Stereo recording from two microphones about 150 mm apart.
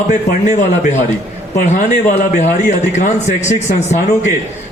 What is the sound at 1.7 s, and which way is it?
Speech, 55° left (ahead or behind).